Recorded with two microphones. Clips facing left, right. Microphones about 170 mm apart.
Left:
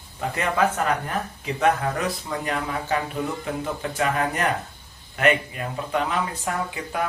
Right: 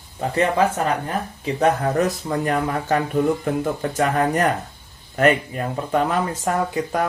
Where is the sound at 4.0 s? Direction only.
45° right (ahead or behind).